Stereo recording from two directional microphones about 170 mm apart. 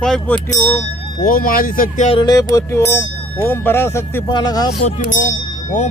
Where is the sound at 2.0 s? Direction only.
30° left (ahead or behind).